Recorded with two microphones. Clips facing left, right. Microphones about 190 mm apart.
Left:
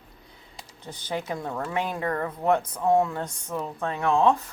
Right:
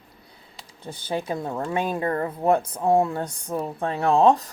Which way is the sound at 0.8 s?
30° right (ahead or behind).